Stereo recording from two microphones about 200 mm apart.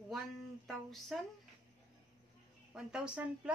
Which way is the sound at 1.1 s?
Centre (ahead or behind).